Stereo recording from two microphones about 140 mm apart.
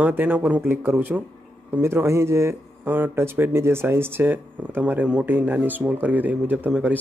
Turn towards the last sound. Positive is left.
turn(degrees=-10)  # may be behind; listen again after turning